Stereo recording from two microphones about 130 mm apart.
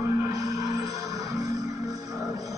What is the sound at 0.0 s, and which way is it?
Music, 25° right (ahead or behind).